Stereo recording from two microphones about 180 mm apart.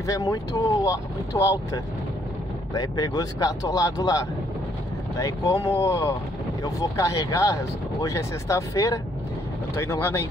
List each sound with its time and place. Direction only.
0.0 s speech: 20° left (ahead or behind)
2.7 s speech: 20° left (ahead or behind)